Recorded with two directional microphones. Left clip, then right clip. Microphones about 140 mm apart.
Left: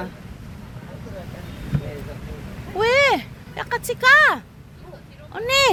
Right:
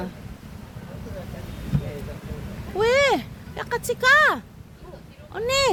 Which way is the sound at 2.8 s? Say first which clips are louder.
Left 2 dB; 40° right (ahead or behind).